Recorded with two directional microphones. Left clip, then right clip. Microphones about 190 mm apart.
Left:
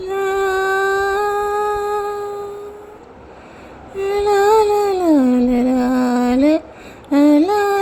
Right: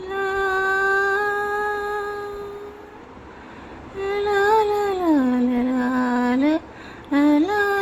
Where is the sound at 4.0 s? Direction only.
20° left (ahead or behind).